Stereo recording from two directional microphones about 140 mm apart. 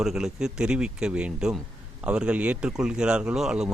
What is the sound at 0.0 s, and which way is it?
Speech, 5° right (ahead or behind).